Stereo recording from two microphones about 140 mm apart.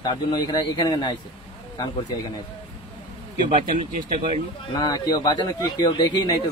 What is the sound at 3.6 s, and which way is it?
Speech, 75° right (ahead or behind).